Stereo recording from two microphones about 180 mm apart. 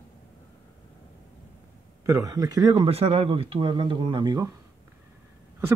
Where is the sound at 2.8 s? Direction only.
30° right (ahead or behind).